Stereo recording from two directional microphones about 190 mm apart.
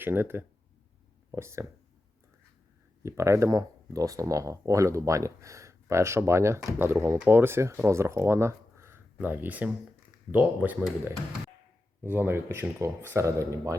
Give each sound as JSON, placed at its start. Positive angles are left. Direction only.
{"t": 0.0, "sound": "speech", "side_deg": -10}
{"t": 3.0, "sound": "speech", "side_deg": -15}
{"t": 12.1, "sound": "speech", "side_deg": -10}